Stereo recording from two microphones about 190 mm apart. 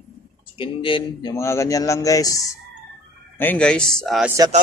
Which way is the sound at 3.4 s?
5° left (ahead or behind).